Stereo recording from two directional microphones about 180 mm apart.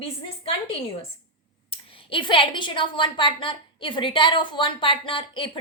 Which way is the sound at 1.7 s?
30° left (ahead or behind).